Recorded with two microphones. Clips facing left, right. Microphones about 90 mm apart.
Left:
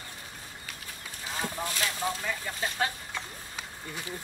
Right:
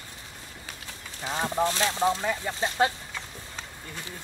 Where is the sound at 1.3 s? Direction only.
30° right (ahead or behind).